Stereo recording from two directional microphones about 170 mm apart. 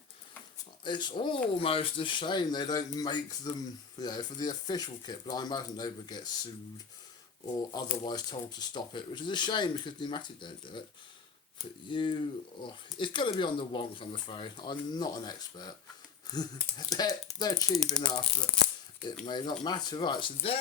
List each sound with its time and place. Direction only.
0.9 s speech: 25° left (ahead or behind)
7.7 s speech: 25° left (ahead or behind)
11.9 s speech: 30° left (ahead or behind)
18.2 s tearing: 5° left (ahead or behind)
19.2 s speech: 25° left (ahead or behind)